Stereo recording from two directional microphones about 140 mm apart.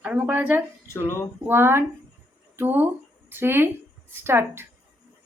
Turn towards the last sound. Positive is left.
turn(degrees=-15)  # may be behind; listen again after turning